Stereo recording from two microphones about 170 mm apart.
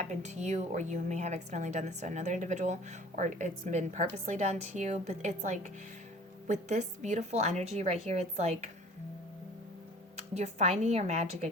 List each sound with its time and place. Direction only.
0.0 s a woman's voice: 45° right (ahead or behind)
10.3 s a woman's voice: 40° right (ahead or behind)